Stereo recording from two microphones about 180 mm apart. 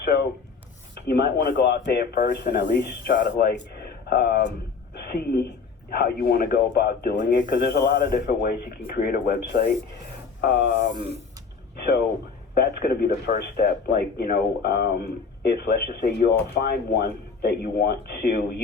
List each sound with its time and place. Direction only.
0.0 s writing: 60° left (ahead or behind)
1.0 s a man's voice: 65° left (ahead or behind)
10.6 s speech: 35° right (ahead or behind)
12.5 s a man's voice: 60° left (ahead or behind)